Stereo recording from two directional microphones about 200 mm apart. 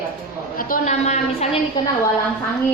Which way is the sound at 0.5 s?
45° left (ahead or behind).